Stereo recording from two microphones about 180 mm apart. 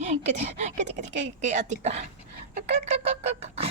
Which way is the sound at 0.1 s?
40° right (ahead or behind).